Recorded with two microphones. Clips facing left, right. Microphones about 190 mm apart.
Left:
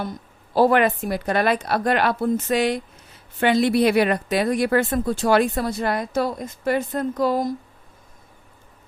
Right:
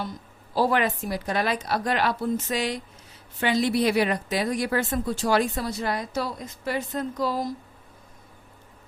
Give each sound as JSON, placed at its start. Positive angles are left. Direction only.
{"t": 0.5, "sound": "a woman's voice", "side_deg": 55}